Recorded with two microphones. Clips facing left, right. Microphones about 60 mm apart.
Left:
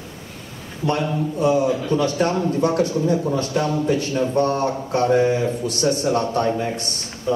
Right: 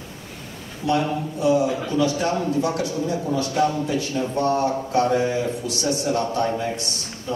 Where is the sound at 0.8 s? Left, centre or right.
Left.